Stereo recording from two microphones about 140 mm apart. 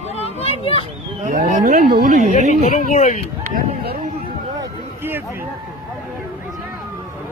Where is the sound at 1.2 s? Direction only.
65° right (ahead or behind).